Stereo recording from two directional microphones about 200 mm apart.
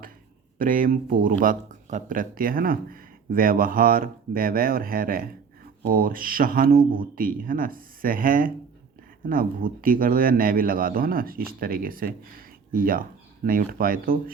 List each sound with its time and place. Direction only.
0.6 s speech: 45° right (ahead or behind)